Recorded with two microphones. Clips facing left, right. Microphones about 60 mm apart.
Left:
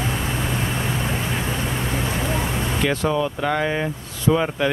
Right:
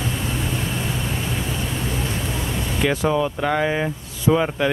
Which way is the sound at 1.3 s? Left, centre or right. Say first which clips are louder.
Left 2 dB; left.